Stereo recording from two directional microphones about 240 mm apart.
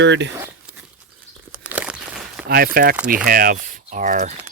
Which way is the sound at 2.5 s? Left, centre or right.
Right.